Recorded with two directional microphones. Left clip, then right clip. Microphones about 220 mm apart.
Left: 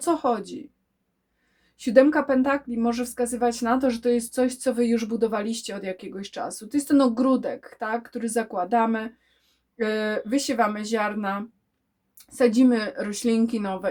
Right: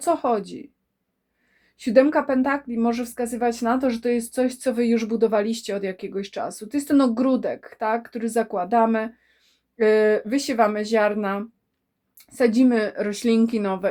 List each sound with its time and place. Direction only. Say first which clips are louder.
0.0 s speech: right 2 dB; 25° right (ahead or behind)
1.8 s speech: right 1 dB; 25° right (ahead or behind)